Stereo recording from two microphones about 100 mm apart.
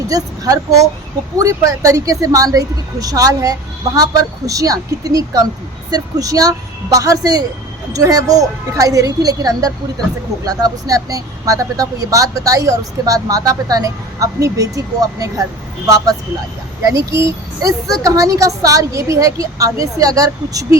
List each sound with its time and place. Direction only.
0.1 s speech: 35° right (ahead or behind)
17.1 s speech: 30° right (ahead or behind)